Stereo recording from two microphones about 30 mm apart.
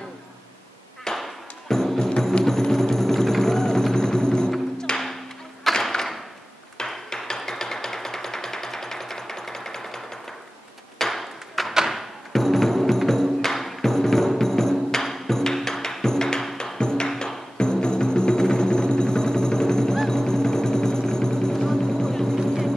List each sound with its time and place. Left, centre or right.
1.1 s a sound: centre
1.7 s music: centre
4.9 s music: centre
7.1 s music: centre
11.0 s a sound: centre
11.9 s music: centre